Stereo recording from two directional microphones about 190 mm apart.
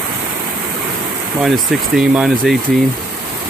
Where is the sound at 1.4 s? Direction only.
5° right (ahead or behind).